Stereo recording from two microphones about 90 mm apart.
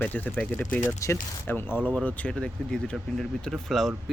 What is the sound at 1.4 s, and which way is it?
Speech, 20° left (ahead or behind).